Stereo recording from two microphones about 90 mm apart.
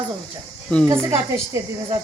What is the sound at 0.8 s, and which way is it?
Speech, 40° right (ahead or behind).